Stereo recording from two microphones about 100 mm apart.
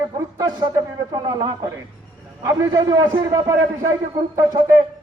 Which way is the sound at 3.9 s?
35° right (ahead or behind).